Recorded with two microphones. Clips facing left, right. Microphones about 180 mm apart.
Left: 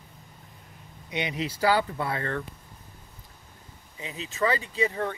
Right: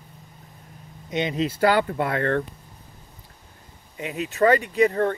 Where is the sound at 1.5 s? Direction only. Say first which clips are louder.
Right 3 dB; 60° right (ahead or behind).